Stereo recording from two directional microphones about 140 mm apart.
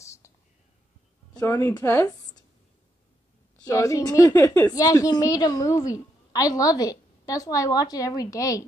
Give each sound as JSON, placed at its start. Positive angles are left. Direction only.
{"t": 0.0, "sound": "whispering", "side_deg": 20}
{"t": 1.4, "sound": "a woman's voice", "side_deg": 15}
{"t": 3.5, "sound": "a woman's voice", "side_deg": 25}